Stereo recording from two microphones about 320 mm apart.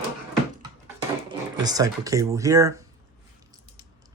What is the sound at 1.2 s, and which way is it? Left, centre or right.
Speech, centre.